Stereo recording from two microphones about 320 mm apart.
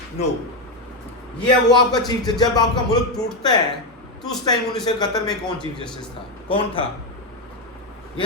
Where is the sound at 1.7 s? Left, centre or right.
Centre.